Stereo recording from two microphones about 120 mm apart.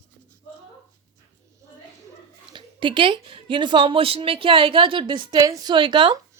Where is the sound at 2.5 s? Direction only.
40° right (ahead or behind).